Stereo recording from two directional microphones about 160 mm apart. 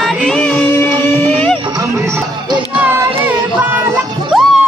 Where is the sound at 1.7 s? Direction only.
20° right (ahead or behind).